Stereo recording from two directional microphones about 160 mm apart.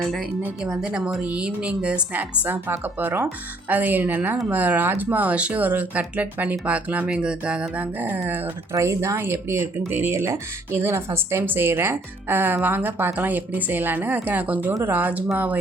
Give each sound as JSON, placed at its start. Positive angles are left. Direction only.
{"t": 0.4, "sound": "speech", "side_deg": -5}